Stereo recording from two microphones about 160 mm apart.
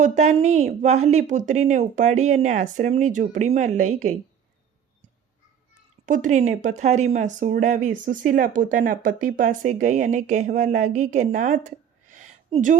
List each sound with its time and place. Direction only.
0.0 s speech: 50° right (ahead or behind)
6.1 s speech: 50° right (ahead or behind)
12.1 s a sound: 50° right (ahead or behind)